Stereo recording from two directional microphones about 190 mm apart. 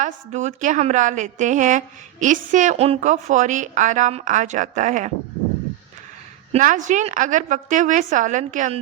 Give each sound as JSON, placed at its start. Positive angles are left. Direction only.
{"t": 0.0, "sound": "a woman's voice", "side_deg": -40}
{"t": 6.5, "sound": "a woman's voice", "side_deg": -45}